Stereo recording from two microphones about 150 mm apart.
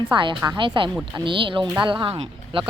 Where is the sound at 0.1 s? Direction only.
35° right (ahead or behind).